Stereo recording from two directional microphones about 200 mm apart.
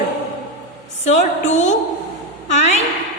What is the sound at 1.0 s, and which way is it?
A woman's voice, 35° left (ahead or behind).